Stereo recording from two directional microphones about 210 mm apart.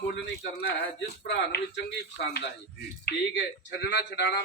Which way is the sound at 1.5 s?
50° left (ahead or behind).